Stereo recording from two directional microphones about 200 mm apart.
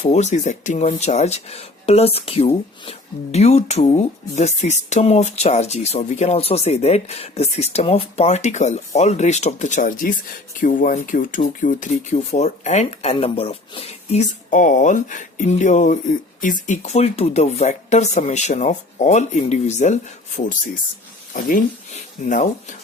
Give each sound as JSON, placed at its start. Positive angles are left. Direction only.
{"t": 0.0, "sound": "speech", "side_deg": 35}